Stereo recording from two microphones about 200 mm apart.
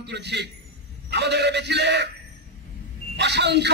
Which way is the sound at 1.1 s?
60° right (ahead or behind).